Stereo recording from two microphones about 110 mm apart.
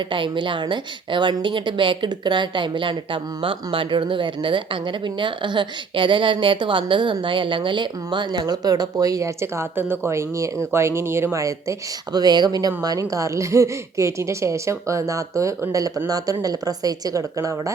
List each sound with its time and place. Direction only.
0.1 s a woman's voice: 50° right (ahead or behind); by 17.5 s 30° right (ahead or behind)